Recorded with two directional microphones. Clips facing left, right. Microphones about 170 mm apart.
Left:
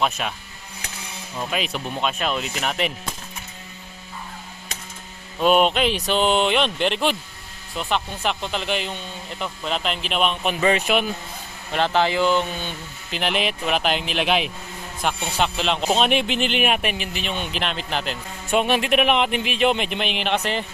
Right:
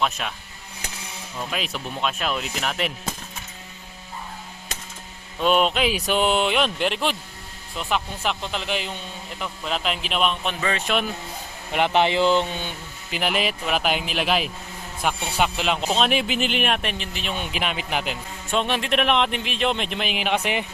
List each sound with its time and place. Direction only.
0.0 s speech: 5° left (ahead or behind)
1.5 s speech: centre (ahead or behind)
5.4 s speech: 5° left (ahead or behind)
10.6 s speech: 20° left (ahead or behind)
11.7 s speech: 15° right (ahead or behind)
13.1 s speech: 5° right (ahead or behind)
18.5 s speech: 10° left (ahead or behind); by 20.7 s 10° right (ahead or behind)